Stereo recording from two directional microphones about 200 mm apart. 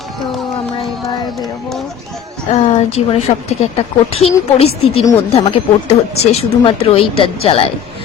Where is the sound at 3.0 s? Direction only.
30° left (ahead or behind).